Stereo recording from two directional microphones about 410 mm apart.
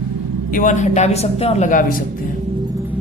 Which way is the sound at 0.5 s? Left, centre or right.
Centre.